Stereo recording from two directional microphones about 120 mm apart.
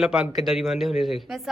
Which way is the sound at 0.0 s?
5° right (ahead or behind).